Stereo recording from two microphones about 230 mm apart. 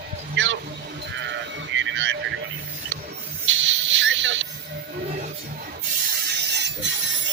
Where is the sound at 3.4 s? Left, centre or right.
Right.